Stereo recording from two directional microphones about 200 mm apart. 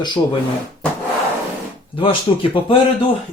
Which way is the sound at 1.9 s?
25° left (ahead or behind).